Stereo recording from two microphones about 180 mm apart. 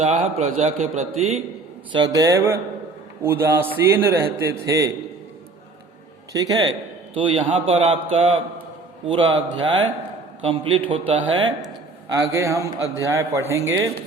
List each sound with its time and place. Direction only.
0.0 s speech: 40° right (ahead or behind)
1.9 s a man's voice: 25° right (ahead or behind)
6.3 s a man's voice: 20° right (ahead or behind)